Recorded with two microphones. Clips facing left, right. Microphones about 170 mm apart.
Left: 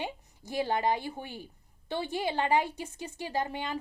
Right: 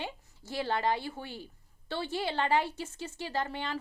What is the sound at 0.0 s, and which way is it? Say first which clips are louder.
A woman's voice: left 3 dB; 15° left (ahead or behind).